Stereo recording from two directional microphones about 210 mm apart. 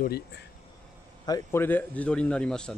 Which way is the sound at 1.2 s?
15° left (ahead or behind).